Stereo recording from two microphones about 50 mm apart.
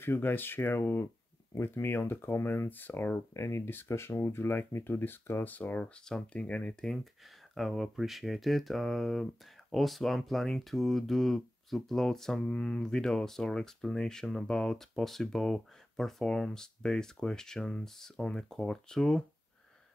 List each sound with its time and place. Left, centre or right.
0.0 s speech: left
1.5 s speech: left
3.3 s speech: left
3.6 s speech: left
5.5 s speech: left
5.9 s speech: centre
7.5 s speech: centre
12.4 s speech: centre